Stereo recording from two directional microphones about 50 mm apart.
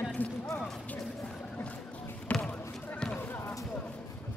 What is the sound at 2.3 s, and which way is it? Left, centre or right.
Basketball bounce, left.